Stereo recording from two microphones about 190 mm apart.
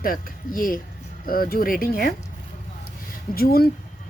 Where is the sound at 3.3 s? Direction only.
50° left (ahead or behind).